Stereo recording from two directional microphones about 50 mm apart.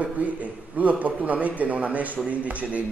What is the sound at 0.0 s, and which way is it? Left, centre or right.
A man's voice, right.